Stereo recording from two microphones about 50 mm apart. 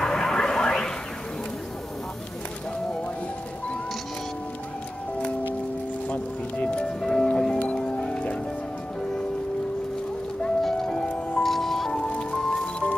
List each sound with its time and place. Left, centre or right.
0.0 s a sound: centre
6.0 s music: left
10.4 s music: centre
11.1 s music: left
11.4 s music: centre
11.9 s music: centre